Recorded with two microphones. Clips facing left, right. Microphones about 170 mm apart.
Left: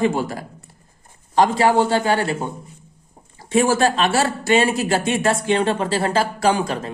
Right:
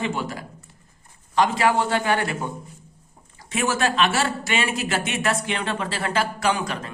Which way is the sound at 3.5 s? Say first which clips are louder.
Left 7 dB; 30° left (ahead or behind).